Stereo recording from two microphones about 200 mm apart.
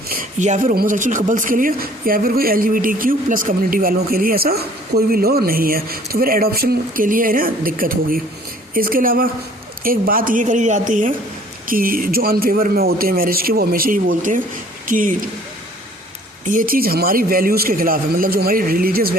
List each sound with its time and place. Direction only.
0.1 s a woman's voice: 40° right (ahead or behind)
16.4 s speech: 40° right (ahead or behind)